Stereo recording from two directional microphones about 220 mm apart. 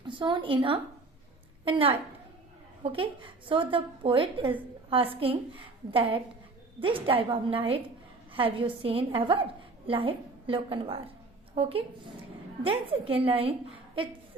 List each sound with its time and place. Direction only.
0.0 s a woman's voice: 20° right (ahead or behind)